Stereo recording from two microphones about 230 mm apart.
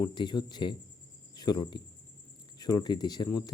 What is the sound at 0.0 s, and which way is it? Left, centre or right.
Speech, centre.